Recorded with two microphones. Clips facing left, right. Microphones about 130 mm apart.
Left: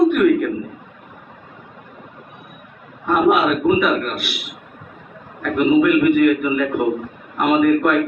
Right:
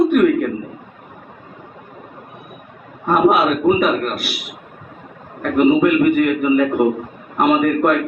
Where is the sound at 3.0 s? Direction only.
40° right (ahead or behind).